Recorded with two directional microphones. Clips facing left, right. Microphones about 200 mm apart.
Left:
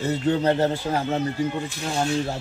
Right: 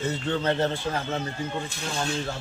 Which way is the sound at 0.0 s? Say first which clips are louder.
Left 5 dB; 35° left (ahead or behind).